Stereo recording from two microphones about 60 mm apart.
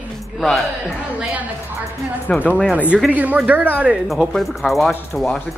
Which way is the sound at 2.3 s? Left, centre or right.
Centre.